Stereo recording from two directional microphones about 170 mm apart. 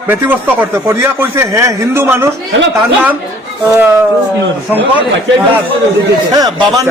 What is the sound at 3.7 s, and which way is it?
Speech, 15° right (ahead or behind).